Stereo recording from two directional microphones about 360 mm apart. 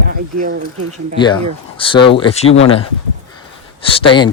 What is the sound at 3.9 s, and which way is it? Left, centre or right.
Speech, centre.